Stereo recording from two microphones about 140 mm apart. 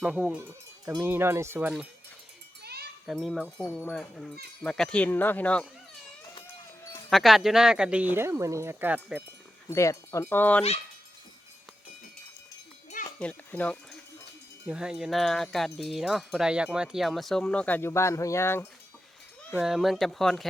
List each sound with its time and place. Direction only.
0.0 s speech: 5° right (ahead or behind)
3.1 s wind chime: 5° right (ahead or behind)
3.8 s speech: 5° left (ahead or behind)
7.1 s speech: centre (ahead or behind)
9.6 s speech: 20° left (ahead or behind)
13.1 s speech: 10° left (ahead or behind)
14.7 s wind chime: 5° right (ahead or behind); by 18.7 s 15° left (ahead or behind)
19.5 s wind chime: 5° right (ahead or behind)